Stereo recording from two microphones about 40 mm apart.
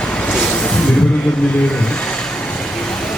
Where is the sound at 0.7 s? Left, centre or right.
Left.